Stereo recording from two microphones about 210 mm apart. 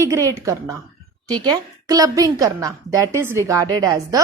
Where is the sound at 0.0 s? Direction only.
15° right (ahead or behind).